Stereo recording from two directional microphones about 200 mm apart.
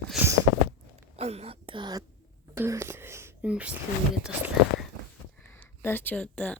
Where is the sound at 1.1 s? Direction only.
30° right (ahead or behind).